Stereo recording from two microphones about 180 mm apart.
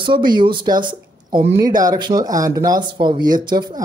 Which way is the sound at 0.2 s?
25° right (ahead or behind).